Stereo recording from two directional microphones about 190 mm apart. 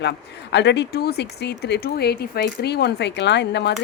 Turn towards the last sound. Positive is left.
turn(degrees=65)  # may be behind; listen again after turning